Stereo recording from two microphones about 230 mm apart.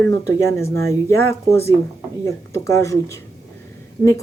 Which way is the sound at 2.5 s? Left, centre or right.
Centre.